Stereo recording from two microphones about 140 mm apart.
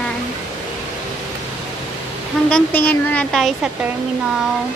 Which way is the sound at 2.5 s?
15° left (ahead or behind).